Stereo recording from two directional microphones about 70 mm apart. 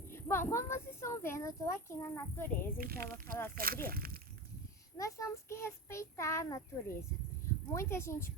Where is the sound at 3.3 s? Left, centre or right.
Left.